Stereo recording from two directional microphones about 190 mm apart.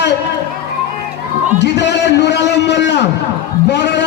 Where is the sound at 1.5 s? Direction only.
65° left (ahead or behind).